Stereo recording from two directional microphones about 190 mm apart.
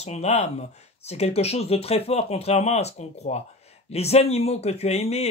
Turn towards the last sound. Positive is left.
turn(degrees=35)  # may be behind; listen again after turning